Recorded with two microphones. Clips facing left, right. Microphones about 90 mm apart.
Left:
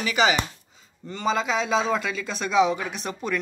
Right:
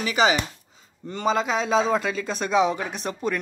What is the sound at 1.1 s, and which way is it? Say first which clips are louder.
Speech: right 1 dB; 45° right (ahead or behind).